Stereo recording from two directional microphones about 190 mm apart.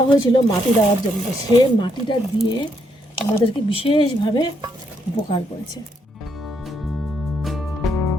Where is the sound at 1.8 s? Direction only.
25° left (ahead or behind).